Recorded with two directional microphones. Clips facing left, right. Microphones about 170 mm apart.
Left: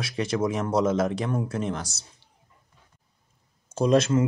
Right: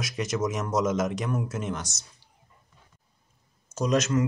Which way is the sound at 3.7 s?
30° left (ahead or behind).